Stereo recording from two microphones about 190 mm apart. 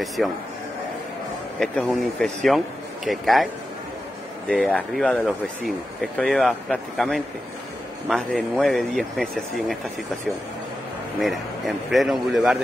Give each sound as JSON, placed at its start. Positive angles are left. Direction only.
{"t": 0.2, "sound": "speech", "side_deg": 0}
{"t": 1.6, "sound": "speech", "side_deg": 0}
{"t": 4.5, "sound": "speech", "side_deg": 5}
{"t": 11.1, "sound": "speech", "side_deg": 0}